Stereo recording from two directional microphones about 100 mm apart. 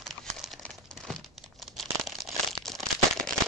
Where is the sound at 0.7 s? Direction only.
5° left (ahead or behind).